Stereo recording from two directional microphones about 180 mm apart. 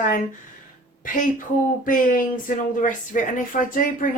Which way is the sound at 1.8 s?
50° left (ahead or behind).